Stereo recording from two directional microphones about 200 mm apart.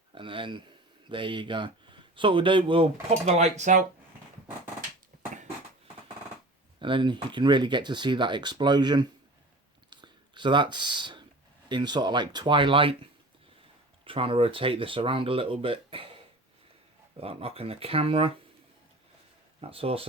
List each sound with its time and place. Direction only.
0.1 s speech: 25° right (ahead or behind)
6.7 s speech: 25° right (ahead or behind)
9.9 s a sound: 25° right (ahead or behind)
11.7 s speech: 20° right (ahead or behind)
19.6 s speech: 30° right (ahead or behind)